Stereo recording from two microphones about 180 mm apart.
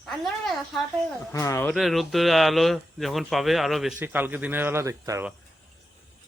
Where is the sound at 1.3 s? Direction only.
15° left (ahead or behind).